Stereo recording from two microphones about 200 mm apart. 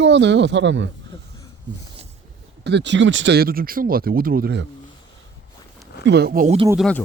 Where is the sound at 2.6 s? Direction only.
60° right (ahead or behind).